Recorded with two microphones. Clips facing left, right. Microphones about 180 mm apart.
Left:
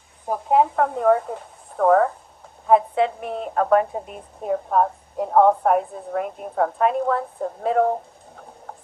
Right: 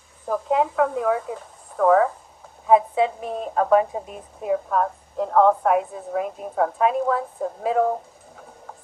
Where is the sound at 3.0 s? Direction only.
20° right (ahead or behind).